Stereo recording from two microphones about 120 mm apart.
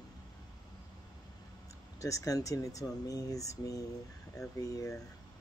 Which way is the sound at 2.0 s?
25° left (ahead or behind).